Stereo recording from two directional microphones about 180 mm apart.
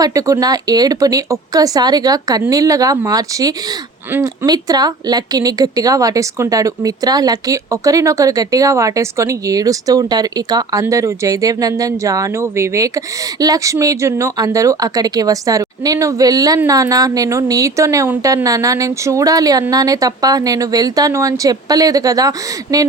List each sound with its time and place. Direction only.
0.0 s a woman's voice: 20° right (ahead or behind)